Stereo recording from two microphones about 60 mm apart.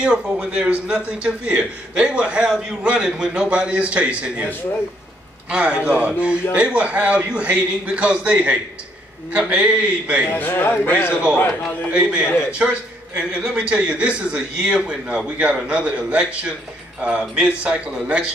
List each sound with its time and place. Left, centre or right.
0.0 s a man's voice: centre
5.5 s a man's voice: centre
10.3 s a man's voice: left
11.9 s a man's voice: centre